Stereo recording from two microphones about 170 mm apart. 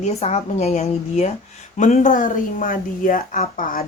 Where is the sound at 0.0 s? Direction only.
40° left (ahead or behind).